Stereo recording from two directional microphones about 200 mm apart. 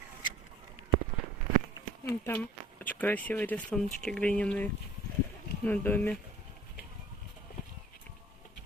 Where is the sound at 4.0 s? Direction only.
5° left (ahead or behind).